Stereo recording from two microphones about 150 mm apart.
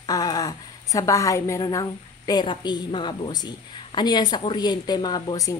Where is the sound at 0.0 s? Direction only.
25° left (ahead or behind).